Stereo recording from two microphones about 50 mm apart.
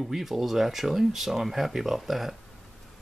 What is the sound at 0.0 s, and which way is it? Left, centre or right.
Speech, centre.